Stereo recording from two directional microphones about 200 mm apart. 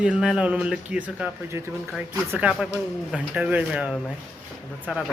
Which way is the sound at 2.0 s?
5° right (ahead or behind).